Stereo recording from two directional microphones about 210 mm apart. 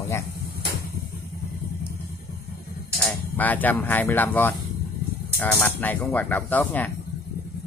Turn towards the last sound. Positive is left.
turn(degrees=10)  # may be behind; listen again after turning